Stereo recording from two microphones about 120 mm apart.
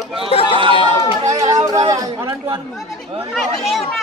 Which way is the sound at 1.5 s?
30° right (ahead or behind).